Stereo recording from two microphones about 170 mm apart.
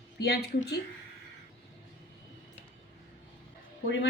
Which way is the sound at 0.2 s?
70° left (ahead or behind).